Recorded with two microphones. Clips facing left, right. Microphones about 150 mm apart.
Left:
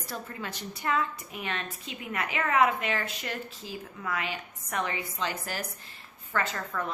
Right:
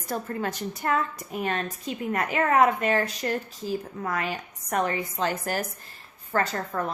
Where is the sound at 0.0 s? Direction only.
50° right (ahead or behind).